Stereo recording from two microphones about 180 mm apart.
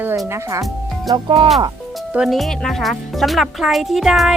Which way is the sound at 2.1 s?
Centre (ahead or behind).